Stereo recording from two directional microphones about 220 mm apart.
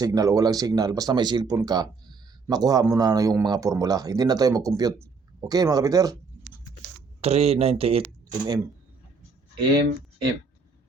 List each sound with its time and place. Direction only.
0.0 s speech: 15° right (ahead or behind)
7.2 s speech: 30° right (ahead or behind)